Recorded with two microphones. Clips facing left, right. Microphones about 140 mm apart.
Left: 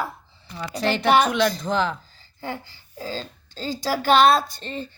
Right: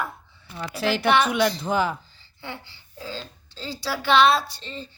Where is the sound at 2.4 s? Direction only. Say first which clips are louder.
Left 5 dB; 45° left (ahead or behind).